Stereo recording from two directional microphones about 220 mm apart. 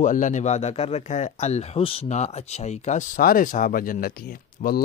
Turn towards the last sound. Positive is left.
turn(degrees=35)  # may be behind; listen again after turning